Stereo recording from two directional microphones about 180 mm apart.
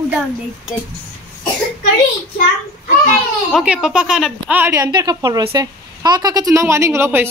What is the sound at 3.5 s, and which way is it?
A woman's voice, 5° right (ahead or behind).